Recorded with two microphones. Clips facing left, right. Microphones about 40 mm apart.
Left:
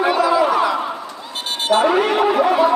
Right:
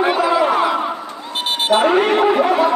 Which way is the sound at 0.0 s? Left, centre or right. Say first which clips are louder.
Even; right.